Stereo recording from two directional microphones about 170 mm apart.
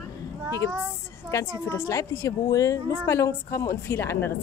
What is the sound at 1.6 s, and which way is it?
A woman's voice, 15° left (ahead or behind).